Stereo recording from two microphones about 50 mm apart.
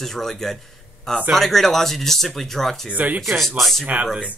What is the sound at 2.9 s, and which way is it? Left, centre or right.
Speech, right.